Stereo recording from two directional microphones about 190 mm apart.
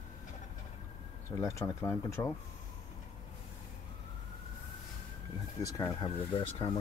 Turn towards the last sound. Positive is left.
turn(degrees=30)  # may be behind; listen again after turning